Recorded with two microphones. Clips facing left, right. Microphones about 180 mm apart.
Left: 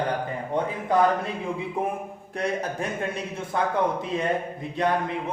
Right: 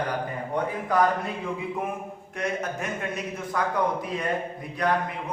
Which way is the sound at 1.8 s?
30° left (ahead or behind).